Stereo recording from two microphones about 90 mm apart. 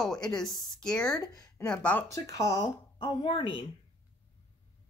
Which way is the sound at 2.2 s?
35° left (ahead or behind).